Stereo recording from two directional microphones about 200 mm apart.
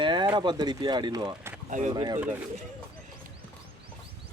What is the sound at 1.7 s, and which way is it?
Speech, 35° right (ahead or behind).